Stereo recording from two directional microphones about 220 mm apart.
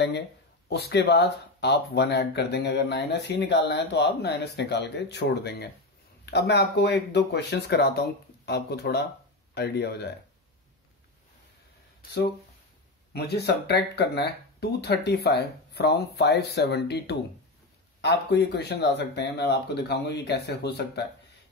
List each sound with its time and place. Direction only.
0.7 s speech: 50° left (ahead or behind)
13.1 s speech: 45° left (ahead or behind)